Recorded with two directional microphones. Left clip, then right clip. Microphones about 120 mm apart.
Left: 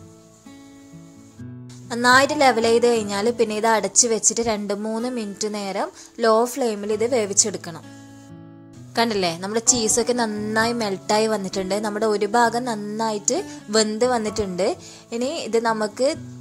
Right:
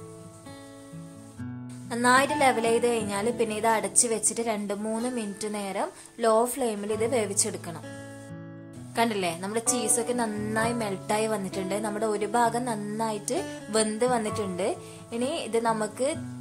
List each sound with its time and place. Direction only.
1.9 s a woman's voice: 40° left (ahead or behind)
8.9 s a woman's voice: 40° left (ahead or behind)